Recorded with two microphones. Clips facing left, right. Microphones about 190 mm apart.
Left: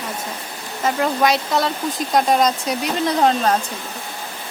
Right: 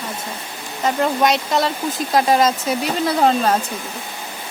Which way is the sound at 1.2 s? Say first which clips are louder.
Left 1 dB; centre (ahead or behind).